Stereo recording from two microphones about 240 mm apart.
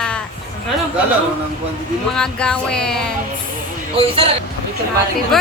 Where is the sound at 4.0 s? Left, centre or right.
Right.